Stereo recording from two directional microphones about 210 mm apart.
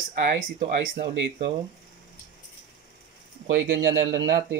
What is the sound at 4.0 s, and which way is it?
Speech, 65° right (ahead or behind).